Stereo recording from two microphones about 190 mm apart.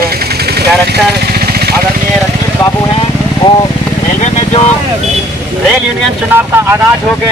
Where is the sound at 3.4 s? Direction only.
25° left (ahead or behind).